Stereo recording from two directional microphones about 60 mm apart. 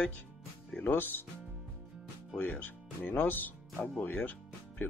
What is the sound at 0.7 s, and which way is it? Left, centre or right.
Speech, left.